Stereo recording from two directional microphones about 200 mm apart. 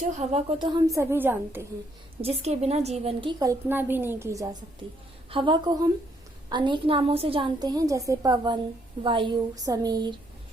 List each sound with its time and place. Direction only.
0.2 s a woman's voice: 30° right (ahead or behind); by 1.6 s 10° right (ahead or behind)
2.2 s a woman's voice: 30° right (ahead or behind); by 4.4 s 15° right (ahead or behind)
5.3 s a woman's voice: 25° right (ahead or behind)